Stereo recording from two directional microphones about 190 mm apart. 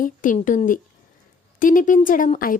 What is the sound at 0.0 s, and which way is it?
Speech, 45° left (ahead or behind).